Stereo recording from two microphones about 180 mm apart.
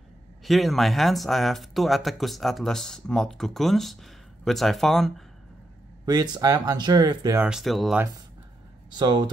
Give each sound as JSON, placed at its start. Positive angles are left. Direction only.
{"t": 0.4, "sound": "speech", "side_deg": 0}
{"t": 6.0, "sound": "speech", "side_deg": -25}
{"t": 7.4, "sound": "speech", "side_deg": 0}
{"t": 8.9, "sound": "speech", "side_deg": -25}